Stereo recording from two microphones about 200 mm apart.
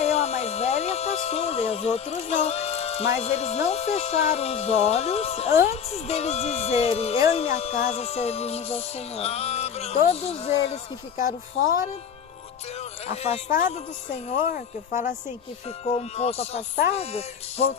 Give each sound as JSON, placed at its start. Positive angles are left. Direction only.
{"t": 0.0, "sound": "music", "side_deg": 30}
{"t": 11.3, "sound": "music", "side_deg": 40}
{"t": 13.1, "sound": "music", "side_deg": 35}
{"t": 15.8, "sound": "music", "side_deg": 30}